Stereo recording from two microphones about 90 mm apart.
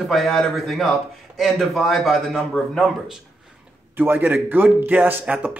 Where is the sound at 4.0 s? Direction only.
20° right (ahead or behind).